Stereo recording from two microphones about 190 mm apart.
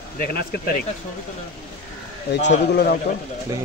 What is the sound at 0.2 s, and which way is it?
Speech, 55° left (ahead or behind).